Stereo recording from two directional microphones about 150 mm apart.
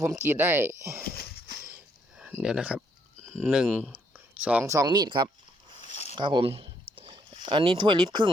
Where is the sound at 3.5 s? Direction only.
10° right (ahead or behind).